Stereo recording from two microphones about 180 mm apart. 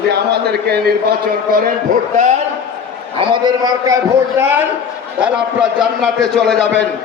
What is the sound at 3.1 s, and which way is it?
Speech, 30° right (ahead or behind).